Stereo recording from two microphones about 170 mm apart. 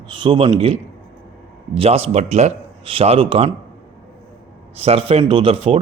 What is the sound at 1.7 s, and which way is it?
A man's voice, 35° right (ahead or behind).